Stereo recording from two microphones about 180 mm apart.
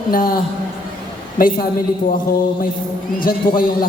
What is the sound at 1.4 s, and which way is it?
Speech, 50° left (ahead or behind).